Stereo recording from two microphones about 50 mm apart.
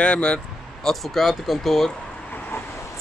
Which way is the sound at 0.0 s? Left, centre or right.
Left.